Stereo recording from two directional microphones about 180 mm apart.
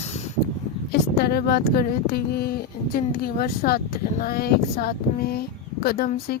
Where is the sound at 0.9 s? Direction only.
60° left (ahead or behind).